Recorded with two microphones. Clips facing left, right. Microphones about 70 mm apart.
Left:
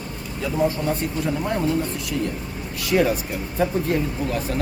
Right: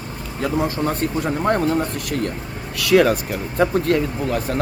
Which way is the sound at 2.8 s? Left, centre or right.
Right.